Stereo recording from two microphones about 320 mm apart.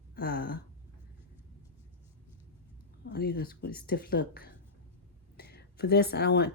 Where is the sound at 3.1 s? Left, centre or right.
Left.